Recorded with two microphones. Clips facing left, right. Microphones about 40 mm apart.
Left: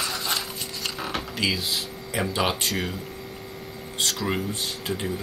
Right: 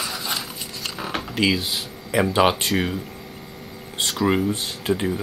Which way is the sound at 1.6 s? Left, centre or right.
Centre.